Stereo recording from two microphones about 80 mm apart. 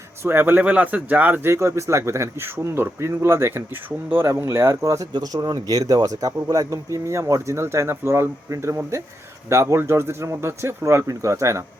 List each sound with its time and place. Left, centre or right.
0.2 s speech: right
0.6 s speech: centre
1.5 s speech: right
5.1 s speech: right